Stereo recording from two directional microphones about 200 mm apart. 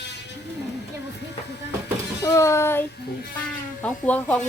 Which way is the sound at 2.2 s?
15° left (ahead or behind).